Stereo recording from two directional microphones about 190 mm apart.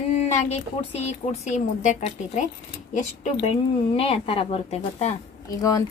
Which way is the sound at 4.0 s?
30° left (ahead or behind).